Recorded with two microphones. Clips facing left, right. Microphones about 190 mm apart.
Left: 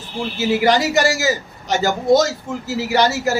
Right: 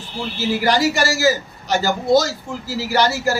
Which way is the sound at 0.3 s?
20° left (ahead or behind).